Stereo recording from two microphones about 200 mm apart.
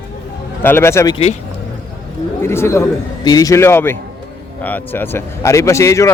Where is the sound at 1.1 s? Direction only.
30° left (ahead or behind).